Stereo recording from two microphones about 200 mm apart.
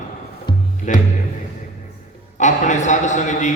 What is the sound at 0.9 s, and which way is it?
Speech, 35° left (ahead or behind).